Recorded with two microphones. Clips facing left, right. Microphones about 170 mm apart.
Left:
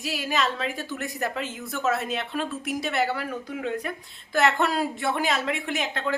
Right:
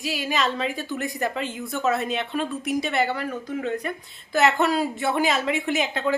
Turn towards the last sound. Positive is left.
turn(degrees=0)  # may be behind; listen again after turning